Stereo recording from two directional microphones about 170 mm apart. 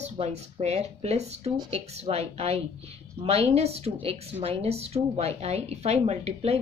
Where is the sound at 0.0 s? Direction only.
40° right (ahead or behind).